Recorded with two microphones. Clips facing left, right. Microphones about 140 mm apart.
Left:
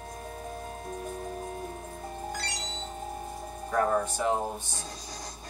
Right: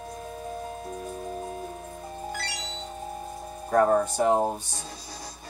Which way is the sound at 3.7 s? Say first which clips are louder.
Right 6 dB; 40° right (ahead or behind).